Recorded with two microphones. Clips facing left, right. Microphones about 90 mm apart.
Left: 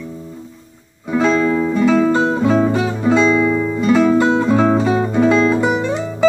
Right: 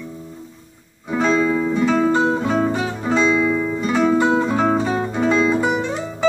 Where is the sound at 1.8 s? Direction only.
30° right (ahead or behind).